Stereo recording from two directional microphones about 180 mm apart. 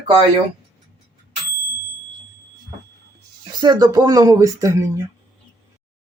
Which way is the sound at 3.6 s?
20° right (ahead or behind).